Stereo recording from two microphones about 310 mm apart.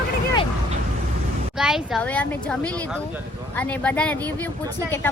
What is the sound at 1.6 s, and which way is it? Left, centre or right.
A woman's voice, centre.